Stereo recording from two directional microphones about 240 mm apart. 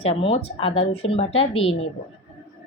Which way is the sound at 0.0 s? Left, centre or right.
Left.